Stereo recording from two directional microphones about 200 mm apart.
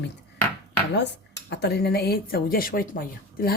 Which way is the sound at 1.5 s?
55° left (ahead or behind).